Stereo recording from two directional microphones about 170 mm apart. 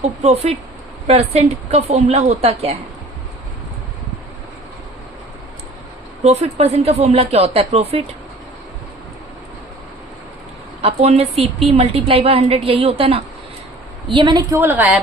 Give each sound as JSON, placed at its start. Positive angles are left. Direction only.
{"t": 0.0, "sound": "a woman's voice", "side_deg": -40}
{"t": 6.2, "sound": "a woman's voice", "side_deg": -35}
{"t": 10.8, "sound": "a woman's voice", "side_deg": -35}
{"t": 14.6, "sound": "a woman's voice", "side_deg": -10}